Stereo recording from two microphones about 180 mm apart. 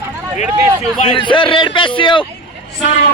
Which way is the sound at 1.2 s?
25° left (ahead or behind).